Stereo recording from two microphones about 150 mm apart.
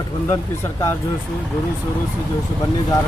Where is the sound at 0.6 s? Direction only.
20° left (ahead or behind).